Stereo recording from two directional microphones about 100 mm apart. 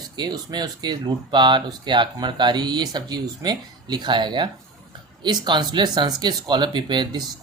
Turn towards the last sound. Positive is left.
turn(degrees=-50)  # may be behind; listen again after turning